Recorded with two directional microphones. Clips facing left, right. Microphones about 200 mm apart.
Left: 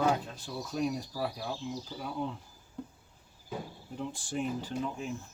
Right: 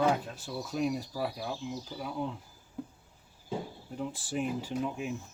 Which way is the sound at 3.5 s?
25° right (ahead or behind).